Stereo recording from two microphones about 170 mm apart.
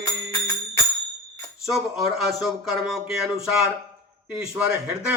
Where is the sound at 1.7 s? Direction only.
Centre (ahead or behind).